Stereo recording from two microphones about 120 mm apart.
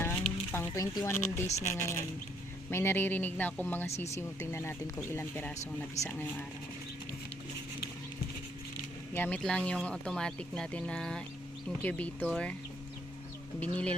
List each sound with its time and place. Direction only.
0.5 s speech: 20° left (ahead or behind)
9.1 s speech: 15° left (ahead or behind)
13.6 s speech: 10° left (ahead or behind)